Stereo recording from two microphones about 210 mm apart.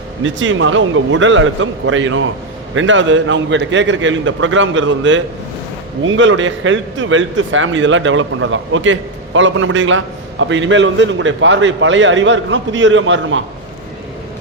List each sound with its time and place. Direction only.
0.2 s a man's voice: 65° right (ahead or behind)